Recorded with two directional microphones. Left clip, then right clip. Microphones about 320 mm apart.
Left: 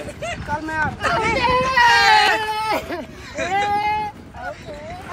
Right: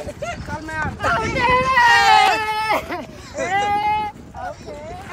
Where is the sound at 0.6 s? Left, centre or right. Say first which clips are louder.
Left 2 dB; centre.